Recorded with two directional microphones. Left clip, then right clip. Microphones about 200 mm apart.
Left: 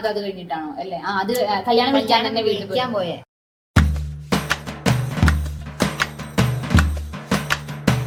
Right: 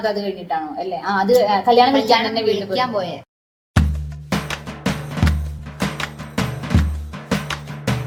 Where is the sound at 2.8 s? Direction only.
10° left (ahead or behind).